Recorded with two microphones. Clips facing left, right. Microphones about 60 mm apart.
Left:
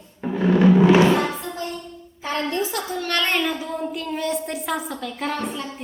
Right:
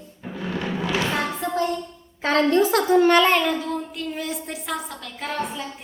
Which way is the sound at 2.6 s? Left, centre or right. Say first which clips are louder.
Right 8 dB; right.